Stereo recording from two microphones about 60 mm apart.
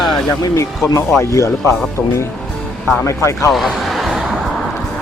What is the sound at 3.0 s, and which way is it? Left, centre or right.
Speech, left.